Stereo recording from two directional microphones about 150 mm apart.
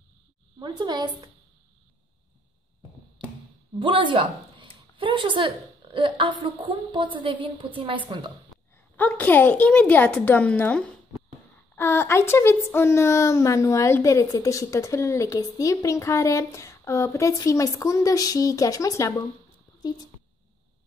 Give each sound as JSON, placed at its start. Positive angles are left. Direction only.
{"t": 0.6, "sound": "a woman's voice", "side_deg": -30}
{"t": 3.8, "sound": "a woman's voice", "side_deg": -35}
{"t": 8.9, "sound": "speech", "side_deg": 10}